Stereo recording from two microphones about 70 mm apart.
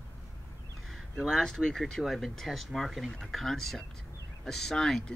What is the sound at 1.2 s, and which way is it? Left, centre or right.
Speech, centre.